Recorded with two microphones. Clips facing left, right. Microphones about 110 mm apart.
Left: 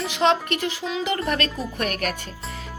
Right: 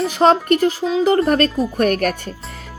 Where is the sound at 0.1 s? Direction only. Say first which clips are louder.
Right 6 dB; 40° right (ahead or behind).